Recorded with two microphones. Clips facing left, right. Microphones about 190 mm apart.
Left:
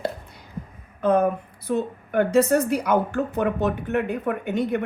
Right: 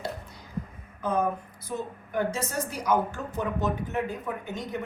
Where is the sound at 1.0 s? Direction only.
60° left (ahead or behind).